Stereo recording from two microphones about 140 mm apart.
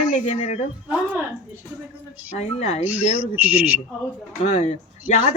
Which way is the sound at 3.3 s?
10° right (ahead or behind).